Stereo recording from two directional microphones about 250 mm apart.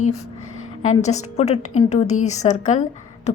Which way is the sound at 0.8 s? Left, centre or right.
Left.